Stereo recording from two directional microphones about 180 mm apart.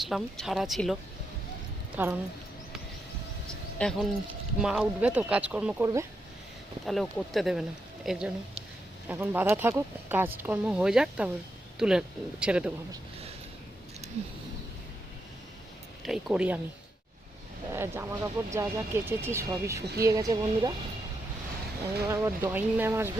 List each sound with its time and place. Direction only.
0.0 s speech: centre (ahead or behind)
2.0 s speech: 10° right (ahead or behind)
3.8 s a woman's voice: centre (ahead or behind)
16.0 s speech: centre (ahead or behind)
17.7 s speech: 15° right (ahead or behind)
22.1 s speech: 15° right (ahead or behind)